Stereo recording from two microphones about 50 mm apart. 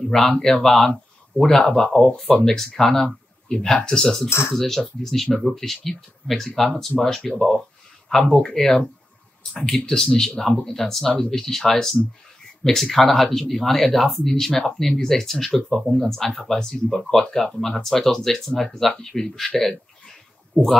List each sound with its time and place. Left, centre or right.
0.0 s speech: centre